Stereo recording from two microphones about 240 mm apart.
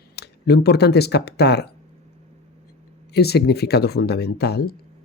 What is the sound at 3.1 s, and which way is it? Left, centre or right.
Speech, left.